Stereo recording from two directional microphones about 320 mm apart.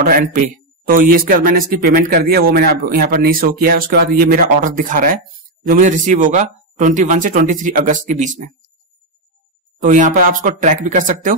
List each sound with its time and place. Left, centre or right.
0.0 s speech: right
9.8 s speech: right